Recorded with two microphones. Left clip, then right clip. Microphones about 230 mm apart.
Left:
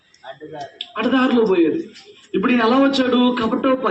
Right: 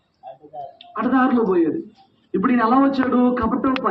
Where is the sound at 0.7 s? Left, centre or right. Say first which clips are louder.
Left 1 dB; centre.